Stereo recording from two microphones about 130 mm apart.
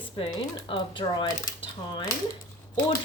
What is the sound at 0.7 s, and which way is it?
Speech, 40° left (ahead or behind).